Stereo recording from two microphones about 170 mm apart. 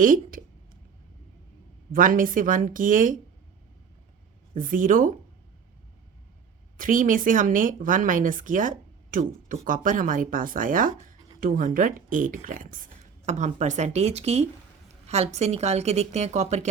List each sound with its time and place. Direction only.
0.0 s speech: 55° right (ahead or behind)
1.9 s speech: 55° right (ahead or behind)
4.5 s speech: 50° right (ahead or behind)
6.7 s a woman's voice: 55° right (ahead or behind)